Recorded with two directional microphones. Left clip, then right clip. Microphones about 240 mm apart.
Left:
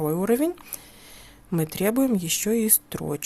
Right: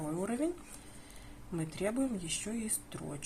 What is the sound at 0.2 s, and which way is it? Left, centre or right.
Speech, left.